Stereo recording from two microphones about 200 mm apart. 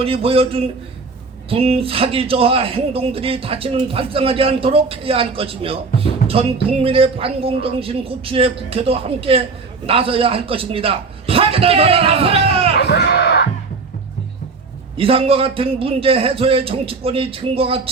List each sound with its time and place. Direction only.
0.0 s a man's voice: 30° right (ahead or behind)
12.7 s music: 55° left (ahead or behind)
14.9 s a man's voice: 30° right (ahead or behind)